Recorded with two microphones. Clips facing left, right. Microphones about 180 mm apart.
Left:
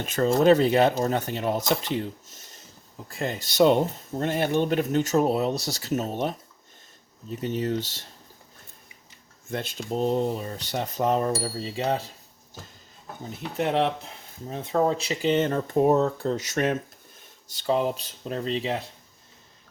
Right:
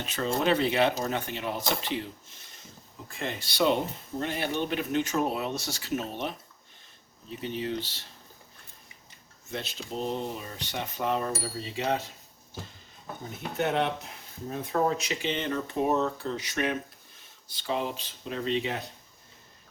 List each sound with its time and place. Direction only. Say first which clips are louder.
0.0 s speech: left 8 dB; 45° left (ahead or behind)
9.5 s speech: left 6 dB; 50° left (ahead or behind); by 12.1 s 35° left (ahead or behind)
13.6 s speech: left 3 dB; 30° left (ahead or behind)